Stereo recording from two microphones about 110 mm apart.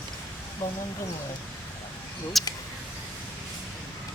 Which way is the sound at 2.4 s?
Centre (ahead or behind).